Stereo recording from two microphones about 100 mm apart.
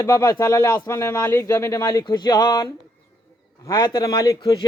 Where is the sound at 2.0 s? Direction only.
45° left (ahead or behind).